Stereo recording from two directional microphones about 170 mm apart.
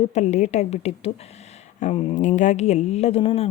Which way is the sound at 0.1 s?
45° left (ahead or behind).